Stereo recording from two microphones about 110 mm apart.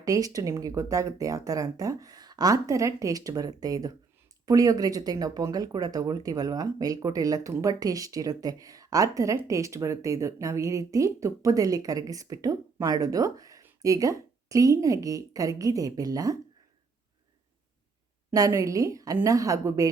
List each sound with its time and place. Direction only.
0.0 s speech: 30° right (ahead or behind)
18.3 s speech: 30° right (ahead or behind)